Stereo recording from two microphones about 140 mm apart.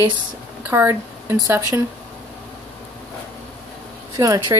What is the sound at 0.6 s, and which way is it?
Speech, 15° right (ahead or behind).